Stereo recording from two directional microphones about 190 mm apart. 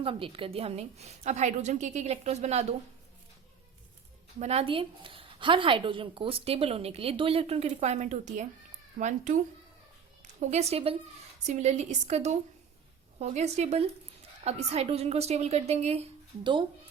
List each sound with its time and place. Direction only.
0.0 s a woman's voice: 30° right (ahead or behind)
4.4 s a woman's voice: 35° right (ahead or behind)
10.4 s a woman's voice: 35° right (ahead or behind)